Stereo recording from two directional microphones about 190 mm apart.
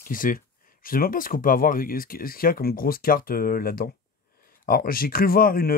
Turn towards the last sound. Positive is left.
turn(degrees=50)  # may be behind; listen again after turning